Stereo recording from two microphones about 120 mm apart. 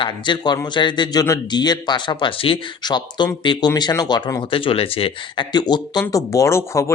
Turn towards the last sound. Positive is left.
turn(degrees=25)  # may be behind; listen again after turning